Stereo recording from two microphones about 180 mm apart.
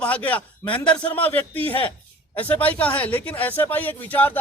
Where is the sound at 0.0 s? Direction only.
10° left (ahead or behind).